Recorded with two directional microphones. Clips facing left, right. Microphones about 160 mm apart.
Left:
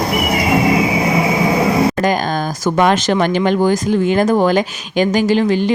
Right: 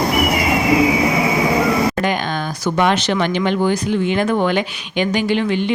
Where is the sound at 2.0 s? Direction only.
40° left (ahead or behind).